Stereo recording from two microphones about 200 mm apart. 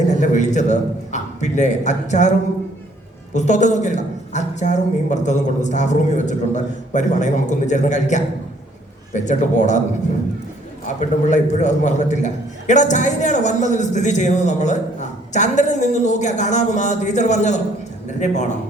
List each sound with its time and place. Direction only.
0.1 s a man's voice: 35° left (ahead or behind)
3.3 s a man's voice: 35° left (ahead or behind)
10.8 s a man's voice: 35° left (ahead or behind)